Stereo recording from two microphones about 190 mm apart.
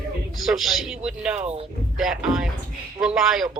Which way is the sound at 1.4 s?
35° right (ahead or behind).